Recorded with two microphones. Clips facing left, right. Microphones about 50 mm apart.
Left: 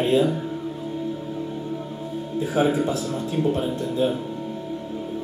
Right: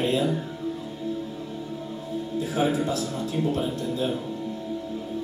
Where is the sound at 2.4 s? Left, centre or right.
Left.